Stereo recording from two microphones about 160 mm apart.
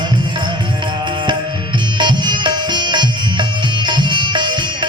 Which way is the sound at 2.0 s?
30° right (ahead or behind).